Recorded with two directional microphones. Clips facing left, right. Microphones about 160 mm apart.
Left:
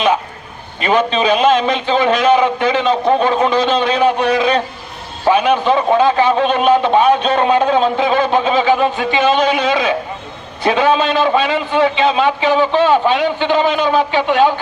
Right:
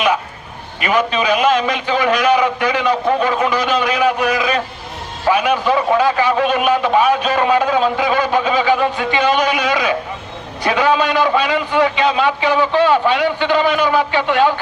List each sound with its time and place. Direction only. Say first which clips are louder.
0.8 s a man's voice: left 2 dB; 25° left (ahead or behind)